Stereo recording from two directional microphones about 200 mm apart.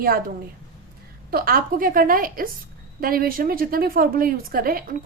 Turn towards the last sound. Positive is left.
turn(degrees=-45)  # may be behind; listen again after turning